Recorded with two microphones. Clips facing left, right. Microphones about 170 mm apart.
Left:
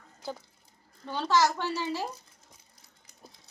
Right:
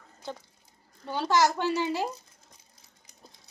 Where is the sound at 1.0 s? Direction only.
15° right (ahead or behind).